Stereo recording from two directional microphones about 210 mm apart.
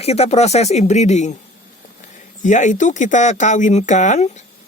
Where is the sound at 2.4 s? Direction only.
35° left (ahead or behind).